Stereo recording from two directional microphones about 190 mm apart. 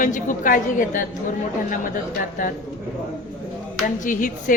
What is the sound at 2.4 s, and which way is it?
Speech, 45° left (ahead or behind).